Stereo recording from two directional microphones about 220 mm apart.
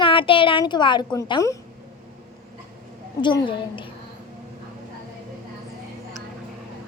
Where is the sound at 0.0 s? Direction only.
25° left (ahead or behind).